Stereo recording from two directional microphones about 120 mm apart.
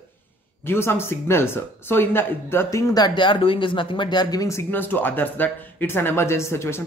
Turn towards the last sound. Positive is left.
turn(degrees=25)  # may be behind; listen again after turning